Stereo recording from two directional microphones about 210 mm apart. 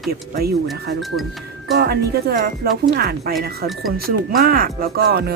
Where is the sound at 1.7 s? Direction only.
50° right (ahead or behind).